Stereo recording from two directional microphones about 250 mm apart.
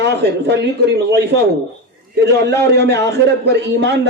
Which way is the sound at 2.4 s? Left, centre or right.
Right.